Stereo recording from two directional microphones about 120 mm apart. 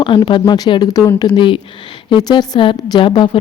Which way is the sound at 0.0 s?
40° left (ahead or behind).